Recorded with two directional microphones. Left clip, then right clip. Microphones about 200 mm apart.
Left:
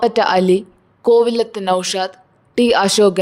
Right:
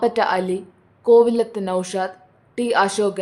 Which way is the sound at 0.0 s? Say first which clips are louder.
Left 5 dB; 45° left (ahead or behind).